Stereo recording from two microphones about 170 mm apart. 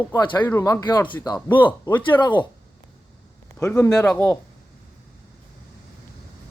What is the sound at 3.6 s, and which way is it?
Speech, 15° left (ahead or behind).